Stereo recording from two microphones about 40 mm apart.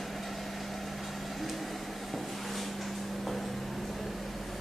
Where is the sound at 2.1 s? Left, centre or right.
Centre.